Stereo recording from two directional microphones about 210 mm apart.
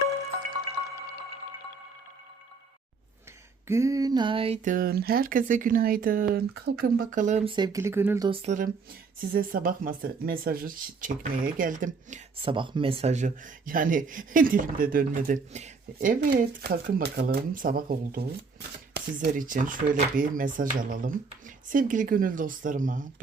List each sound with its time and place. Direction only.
3.7 s speech: 15° right (ahead or behind)
8.3 s speech: 30° right (ahead or behind)
12.4 s speech: 25° right (ahead or behind); by 18.3 s 45° right (ahead or behind)
19.3 s speech: 40° right (ahead or behind)